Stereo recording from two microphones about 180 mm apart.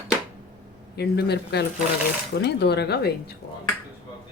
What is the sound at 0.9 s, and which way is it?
Speech, 65° left (ahead or behind).